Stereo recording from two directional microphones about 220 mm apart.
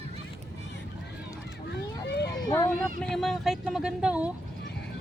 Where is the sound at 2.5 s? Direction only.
5° left (ahead or behind).